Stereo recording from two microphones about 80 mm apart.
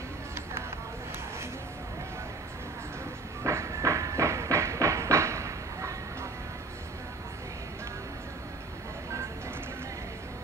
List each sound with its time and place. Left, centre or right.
3.4 s train: right